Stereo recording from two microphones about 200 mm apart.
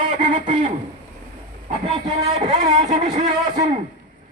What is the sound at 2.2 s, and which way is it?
Speech, 35° right (ahead or behind).